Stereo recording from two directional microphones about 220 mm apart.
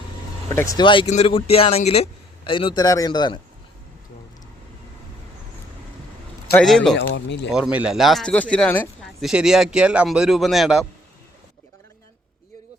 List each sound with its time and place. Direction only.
0.5 s speech: 15° left (ahead or behind)
6.6 s speech: 5° left (ahead or behind)
6.9 s speech: 55° left (ahead or behind)
7.5 s speech: 5° right (ahead or behind)